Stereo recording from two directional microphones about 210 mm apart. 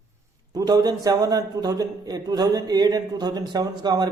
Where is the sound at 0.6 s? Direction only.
15° right (ahead or behind).